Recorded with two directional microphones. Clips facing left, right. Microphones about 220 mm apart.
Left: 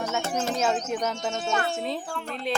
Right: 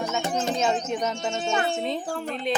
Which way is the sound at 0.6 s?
5° left (ahead or behind).